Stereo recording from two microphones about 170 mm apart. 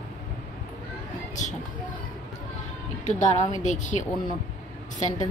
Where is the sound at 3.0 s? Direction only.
45° left (ahead or behind).